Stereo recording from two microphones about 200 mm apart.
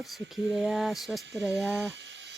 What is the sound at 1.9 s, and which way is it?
Electric toothbrush, 65° right (ahead or behind).